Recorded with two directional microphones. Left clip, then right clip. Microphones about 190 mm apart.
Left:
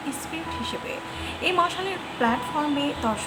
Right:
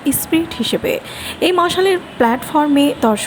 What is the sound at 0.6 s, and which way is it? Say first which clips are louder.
A woman's voice: right 13 dB; 40° right (ahead or behind).